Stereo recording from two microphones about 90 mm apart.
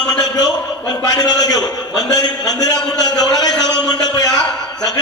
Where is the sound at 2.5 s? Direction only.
45° left (ahead or behind).